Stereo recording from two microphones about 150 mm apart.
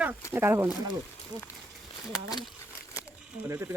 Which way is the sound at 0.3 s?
15° right (ahead or behind).